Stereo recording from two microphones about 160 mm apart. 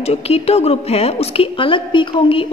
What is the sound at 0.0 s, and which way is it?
A woman's voice, 40° left (ahead or behind).